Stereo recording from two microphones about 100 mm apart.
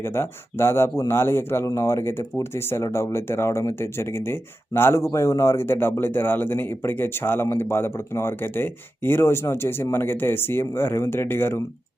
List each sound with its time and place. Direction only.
0.0 s speech: 25° left (ahead or behind)